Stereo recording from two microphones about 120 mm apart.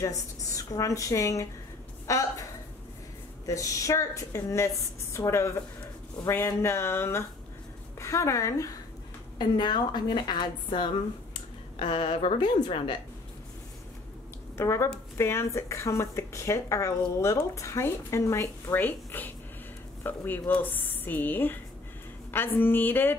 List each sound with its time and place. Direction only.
0.0 s speech: 30° left (ahead or behind)
3.4 s speech: 25° left (ahead or behind)
9.4 s a woman's voice: 35° left (ahead or behind); by 12.4 s 55° left (ahead or behind)
12.4 s a woman's voice: 40° left (ahead or behind)
14.6 s speech: 25° left (ahead or behind)